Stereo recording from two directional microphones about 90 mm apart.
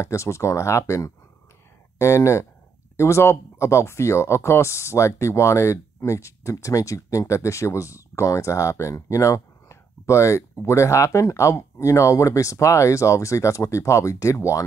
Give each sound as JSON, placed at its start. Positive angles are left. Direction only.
{"t": 0.0, "sound": "speech", "side_deg": 30}